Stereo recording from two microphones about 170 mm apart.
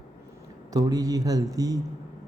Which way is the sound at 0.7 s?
20° right (ahead or behind).